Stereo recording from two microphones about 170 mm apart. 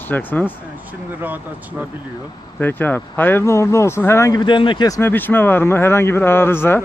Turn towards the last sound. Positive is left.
turn(degrees=15)  # may be behind; listen again after turning